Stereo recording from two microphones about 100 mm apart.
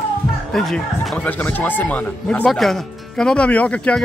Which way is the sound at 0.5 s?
5° left (ahead or behind).